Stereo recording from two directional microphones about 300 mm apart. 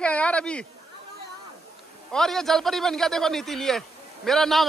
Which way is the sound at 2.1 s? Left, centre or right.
Centre.